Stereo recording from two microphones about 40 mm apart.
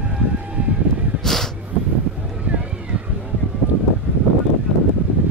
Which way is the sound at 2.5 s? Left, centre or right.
Right.